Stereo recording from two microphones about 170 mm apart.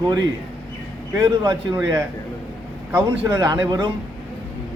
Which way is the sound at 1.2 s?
25° right (ahead or behind).